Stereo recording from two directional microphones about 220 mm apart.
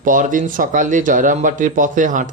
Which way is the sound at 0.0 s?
35° right (ahead or behind).